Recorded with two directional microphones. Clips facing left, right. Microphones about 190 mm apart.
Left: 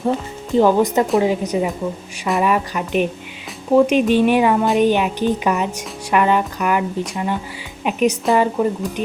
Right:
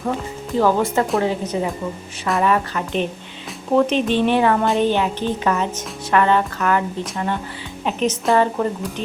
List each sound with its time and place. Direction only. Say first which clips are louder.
0.5 s a woman's voice: left 3 dB; 20° left (ahead or behind)